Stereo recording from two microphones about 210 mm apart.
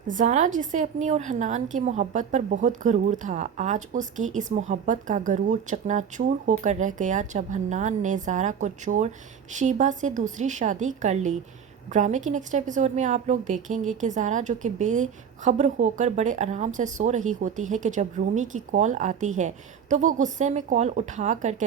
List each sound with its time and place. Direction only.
0.1 s a woman's voice: 35° right (ahead or behind)